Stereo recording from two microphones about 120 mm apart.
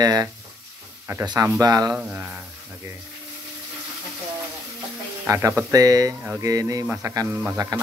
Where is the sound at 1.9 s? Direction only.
15° right (ahead or behind).